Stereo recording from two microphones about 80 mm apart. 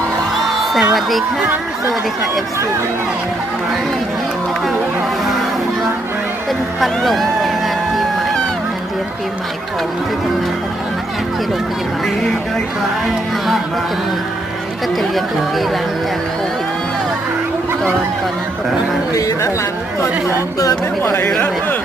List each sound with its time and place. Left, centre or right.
0.4 s music: centre
6.7 s speech: centre
21.0 s speech: left